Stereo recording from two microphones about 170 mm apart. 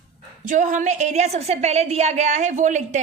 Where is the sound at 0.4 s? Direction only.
45° right (ahead or behind).